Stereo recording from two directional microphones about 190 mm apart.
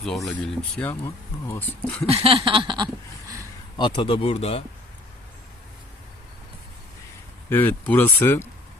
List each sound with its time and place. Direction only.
0.3 s speech: 5° left (ahead or behind)
2.0 s a sound: 30° right (ahead or behind)
3.8 s speech: 25° left (ahead or behind)
7.5 s speech: 10° left (ahead or behind)